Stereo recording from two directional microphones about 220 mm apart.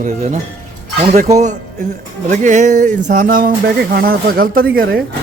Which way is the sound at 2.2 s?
35° right (ahead or behind).